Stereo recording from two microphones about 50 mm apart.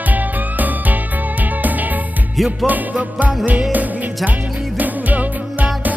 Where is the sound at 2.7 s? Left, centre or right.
Right.